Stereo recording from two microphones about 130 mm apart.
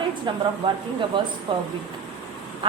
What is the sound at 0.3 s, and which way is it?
A woman's voice, 35° right (ahead or behind).